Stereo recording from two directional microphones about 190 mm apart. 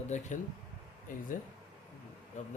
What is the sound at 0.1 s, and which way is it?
Speech, 40° left (ahead or behind).